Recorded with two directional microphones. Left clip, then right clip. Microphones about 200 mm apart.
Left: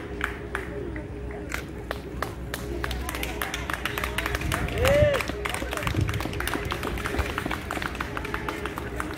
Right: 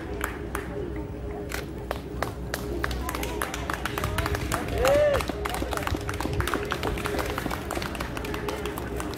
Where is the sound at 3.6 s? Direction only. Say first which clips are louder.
Left 1 dB; 35° left (ahead or behind).